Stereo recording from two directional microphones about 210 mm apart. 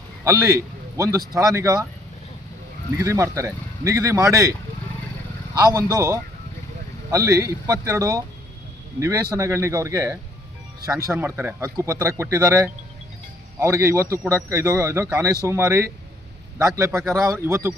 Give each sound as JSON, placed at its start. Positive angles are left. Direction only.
{"t": 0.3, "sound": "a man's voice", "side_deg": -15}
{"t": 3.0, "sound": "speech", "side_deg": -15}
{"t": 5.5, "sound": "speech", "side_deg": -15}